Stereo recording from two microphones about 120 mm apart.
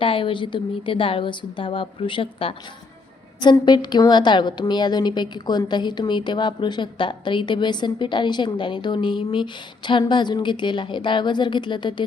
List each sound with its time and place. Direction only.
0.0 s a woman's voice: 50° left (ahead or behind)
3.4 s a woman's voice: 35° left (ahead or behind)